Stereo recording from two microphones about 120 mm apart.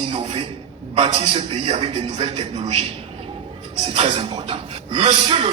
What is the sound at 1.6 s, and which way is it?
Speech, 50° right (ahead or behind).